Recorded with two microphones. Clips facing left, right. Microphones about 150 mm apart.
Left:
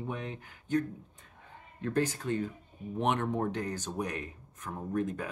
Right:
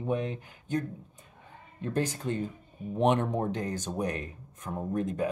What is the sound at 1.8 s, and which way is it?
Speech, 20° right (ahead or behind).